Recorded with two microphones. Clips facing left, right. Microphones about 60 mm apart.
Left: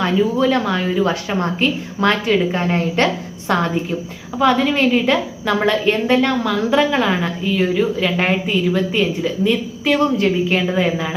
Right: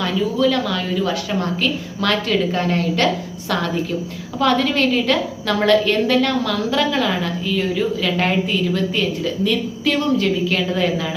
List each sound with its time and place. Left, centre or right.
0.0 s a woman's voice: left
4.4 s a woman's voice: centre